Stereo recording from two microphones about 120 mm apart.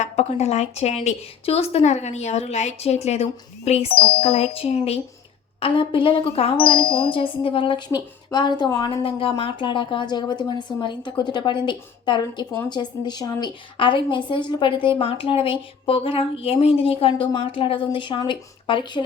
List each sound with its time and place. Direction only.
0.0 s a woman's voice: 70° left (ahead or behind); by 7.9 s 45° left (ahead or behind)
7.9 s speech: 35° left (ahead or behind)
9.0 s a woman's voice: 50° left (ahead or behind)